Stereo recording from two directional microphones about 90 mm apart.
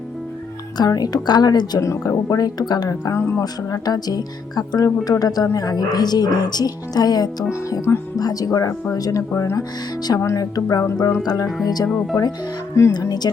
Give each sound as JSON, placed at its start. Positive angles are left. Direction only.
{"t": 0.8, "sound": "speech", "side_deg": 45}
{"t": 1.8, "sound": "speech", "side_deg": 35}
{"t": 3.1, "sound": "speech", "side_deg": 30}
{"t": 3.4, "sound": "speech", "side_deg": 45}
{"t": 7.5, "sound": "speech", "side_deg": 30}
{"t": 8.2, "sound": "speech", "side_deg": 45}
{"t": 10.2, "sound": "speech", "side_deg": 30}
{"t": 10.5, "sound": "speech", "side_deg": 45}